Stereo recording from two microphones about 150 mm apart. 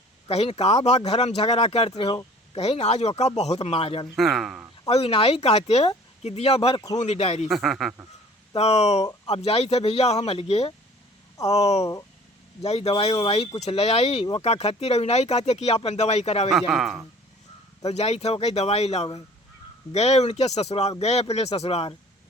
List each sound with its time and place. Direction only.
0.3 s speech: 40° left (ahead or behind)
4.1 s speech: centre (ahead or behind)
4.9 s speech: 40° left (ahead or behind)
7.4 s speech: centre (ahead or behind)
8.5 s speech: 45° left (ahead or behind)
12.6 s speech: 45° left (ahead or behind)
16.5 s speech: centre (ahead or behind)
17.8 s speech: 45° left (ahead or behind)